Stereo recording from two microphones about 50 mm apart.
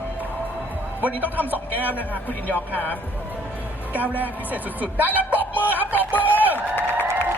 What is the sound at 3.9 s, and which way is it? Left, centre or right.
Speech, right.